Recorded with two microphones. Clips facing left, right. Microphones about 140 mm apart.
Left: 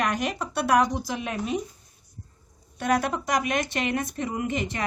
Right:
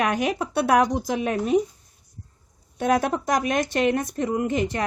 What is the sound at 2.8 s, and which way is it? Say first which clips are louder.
Speech: right 3 dB; 50° right (ahead or behind).